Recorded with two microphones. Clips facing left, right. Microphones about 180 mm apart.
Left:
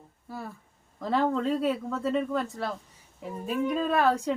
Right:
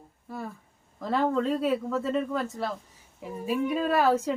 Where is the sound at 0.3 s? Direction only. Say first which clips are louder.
Right 2 dB; centre (ahead or behind).